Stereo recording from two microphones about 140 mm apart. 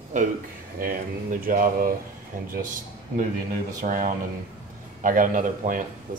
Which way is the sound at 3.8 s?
70° right (ahead or behind).